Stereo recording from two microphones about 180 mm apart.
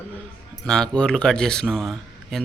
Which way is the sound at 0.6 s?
5° left (ahead or behind).